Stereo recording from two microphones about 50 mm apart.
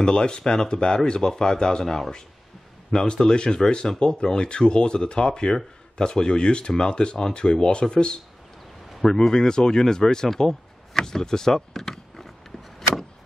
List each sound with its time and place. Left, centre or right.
0.0 s speech: centre